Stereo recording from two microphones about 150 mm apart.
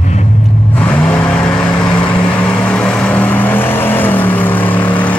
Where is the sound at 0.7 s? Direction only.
10° left (ahead or behind).